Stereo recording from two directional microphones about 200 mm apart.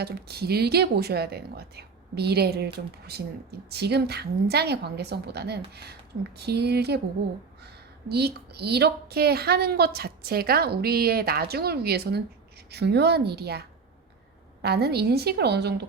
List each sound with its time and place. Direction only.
0.0 s a woman's voice: 50° right (ahead or behind)
8.1 s a woman's voice: 55° right (ahead or behind)